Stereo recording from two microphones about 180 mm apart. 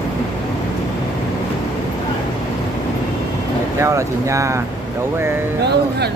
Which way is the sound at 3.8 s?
15° right (ahead or behind).